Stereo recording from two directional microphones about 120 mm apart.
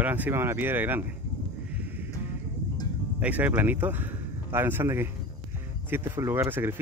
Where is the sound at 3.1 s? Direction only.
15° right (ahead or behind).